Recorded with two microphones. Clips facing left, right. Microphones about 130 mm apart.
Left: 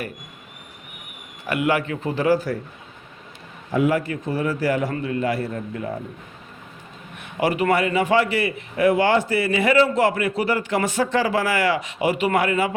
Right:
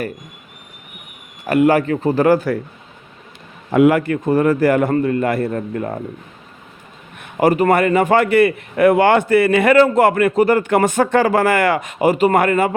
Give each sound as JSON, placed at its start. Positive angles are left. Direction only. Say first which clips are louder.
{"t": 1.5, "sound": "a man's voice", "louder": "right 8 dB", "side_deg": -40}
{"t": 2.2, "sound": "a man's voice", "louder": "right 4 dB", "side_deg": -60}
{"t": 3.7, "sound": "a man's voice", "louder": "right 8 dB", "side_deg": -65}
{"t": 7.2, "sound": "a man's voice", "louder": "right 7 dB", "side_deg": -45}